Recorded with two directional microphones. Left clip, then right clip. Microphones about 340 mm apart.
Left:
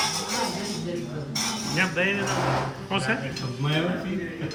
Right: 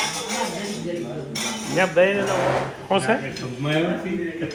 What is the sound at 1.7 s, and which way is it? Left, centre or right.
Speech, centre.